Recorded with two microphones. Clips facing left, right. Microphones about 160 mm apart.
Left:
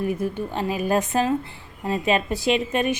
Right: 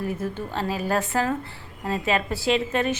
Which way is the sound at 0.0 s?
15° left (ahead or behind).